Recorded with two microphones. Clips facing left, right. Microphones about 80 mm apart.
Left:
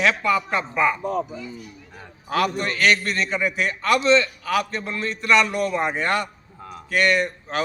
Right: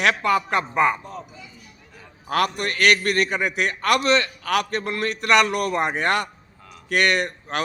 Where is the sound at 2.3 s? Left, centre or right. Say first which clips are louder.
Even; right.